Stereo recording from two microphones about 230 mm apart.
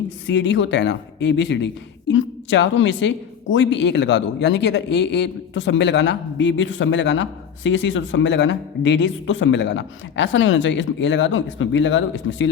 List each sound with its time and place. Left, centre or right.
0.3 s speech: left